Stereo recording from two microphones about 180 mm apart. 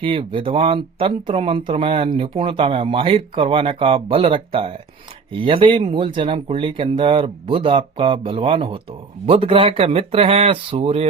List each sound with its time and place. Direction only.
0.0 s speech: 30° right (ahead or behind)